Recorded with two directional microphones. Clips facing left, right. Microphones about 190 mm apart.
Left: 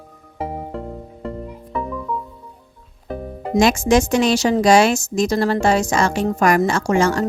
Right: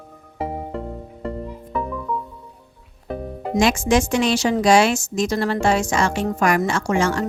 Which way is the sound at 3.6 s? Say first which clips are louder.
Left 3 dB; 40° left (ahead or behind).